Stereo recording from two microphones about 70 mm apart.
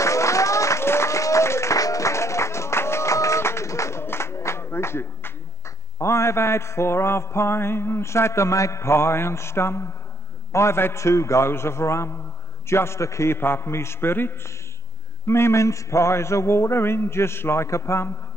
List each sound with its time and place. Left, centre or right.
0.0 s applause: left
5.9 s mantra: left